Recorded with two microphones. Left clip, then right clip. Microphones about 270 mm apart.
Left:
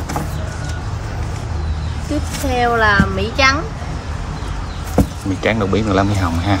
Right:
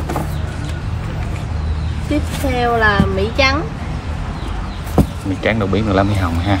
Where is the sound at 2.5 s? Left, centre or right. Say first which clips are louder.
Left 1 dB; centre.